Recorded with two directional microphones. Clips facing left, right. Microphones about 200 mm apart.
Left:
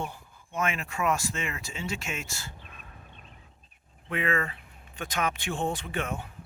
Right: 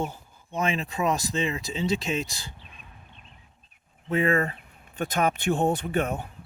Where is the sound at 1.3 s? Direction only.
30° right (ahead or behind).